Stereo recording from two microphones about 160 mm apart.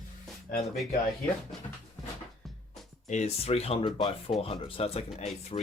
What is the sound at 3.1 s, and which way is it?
Speech, 45° left (ahead or behind).